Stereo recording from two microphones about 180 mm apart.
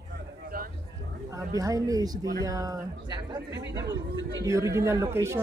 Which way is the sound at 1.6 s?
20° right (ahead or behind).